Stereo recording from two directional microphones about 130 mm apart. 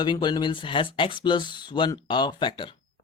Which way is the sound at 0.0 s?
35° left (ahead or behind).